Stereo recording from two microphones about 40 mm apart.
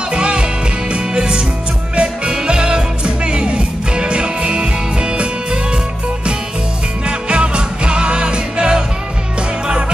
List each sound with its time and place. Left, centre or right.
0.1 s music: right
7.1 s music: right